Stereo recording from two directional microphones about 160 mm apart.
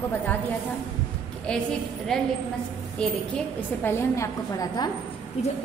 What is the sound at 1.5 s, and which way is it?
A woman's voice, 5° left (ahead or behind).